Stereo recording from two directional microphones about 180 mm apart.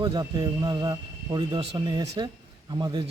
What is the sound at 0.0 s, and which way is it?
A man's voice, 25° right (ahead or behind).